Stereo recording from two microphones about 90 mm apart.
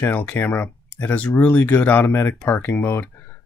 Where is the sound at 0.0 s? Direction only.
20° left (ahead or behind).